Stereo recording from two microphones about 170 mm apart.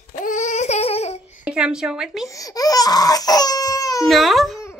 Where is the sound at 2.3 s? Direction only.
20° left (ahead or behind).